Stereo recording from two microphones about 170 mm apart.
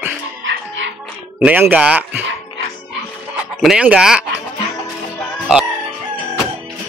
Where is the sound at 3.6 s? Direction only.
5° right (ahead or behind).